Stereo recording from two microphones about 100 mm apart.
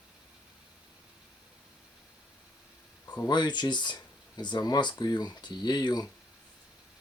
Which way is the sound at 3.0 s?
40° left (ahead or behind).